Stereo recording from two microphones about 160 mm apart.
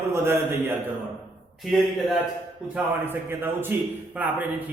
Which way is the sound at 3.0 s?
15° right (ahead or behind).